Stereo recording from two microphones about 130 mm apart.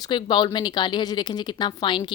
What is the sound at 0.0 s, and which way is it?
Speech, 35° left (ahead or behind).